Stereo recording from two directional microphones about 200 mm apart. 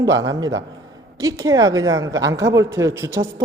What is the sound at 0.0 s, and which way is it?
A woman's voice, 15° right (ahead or behind).